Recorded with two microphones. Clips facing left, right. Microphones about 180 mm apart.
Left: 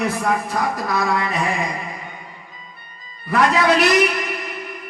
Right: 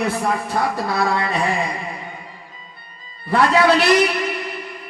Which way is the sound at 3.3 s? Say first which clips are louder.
Right 2 dB; 30° right (ahead or behind).